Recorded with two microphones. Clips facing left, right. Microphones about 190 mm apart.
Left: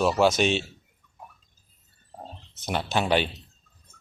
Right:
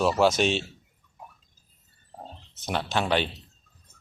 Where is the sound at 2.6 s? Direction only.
5° left (ahead or behind).